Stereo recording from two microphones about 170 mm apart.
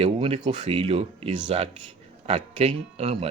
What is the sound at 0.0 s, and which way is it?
Speech, 30° right (ahead or behind).